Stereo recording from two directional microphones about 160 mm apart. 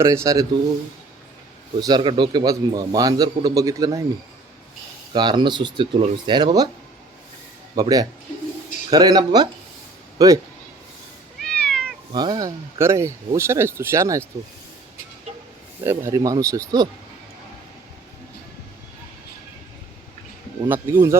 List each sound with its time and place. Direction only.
0.0 s a man's voice: 20° right (ahead or behind)
1.8 s a man's voice: 30° right (ahead or behind)
5.1 s a man's voice: 25° right (ahead or behind)
7.8 s a man's voice: 25° right (ahead or behind)
11.3 s cat: 5° left (ahead or behind)
12.1 s speech: 25° right (ahead or behind)
15.8 s a man's voice: 15° right (ahead or behind)
20.7 s speech: 15° right (ahead or behind)